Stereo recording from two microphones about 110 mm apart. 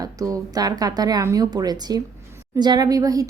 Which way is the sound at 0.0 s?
35° right (ahead or behind).